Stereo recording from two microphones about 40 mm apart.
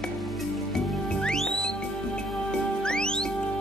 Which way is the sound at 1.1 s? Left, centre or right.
Left.